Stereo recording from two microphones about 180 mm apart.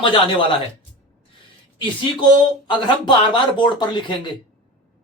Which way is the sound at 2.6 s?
25° left (ahead or behind).